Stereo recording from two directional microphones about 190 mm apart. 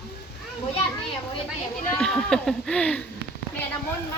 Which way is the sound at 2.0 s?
5° left (ahead or behind).